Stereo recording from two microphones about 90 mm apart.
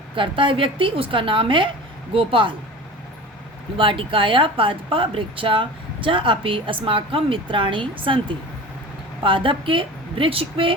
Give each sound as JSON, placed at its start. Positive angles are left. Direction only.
{"t": 0.2, "sound": "speech", "side_deg": -70}
{"t": 3.8, "sound": "speech", "side_deg": -75}